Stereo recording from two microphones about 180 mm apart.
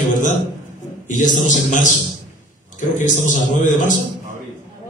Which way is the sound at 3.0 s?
45° left (ahead or behind).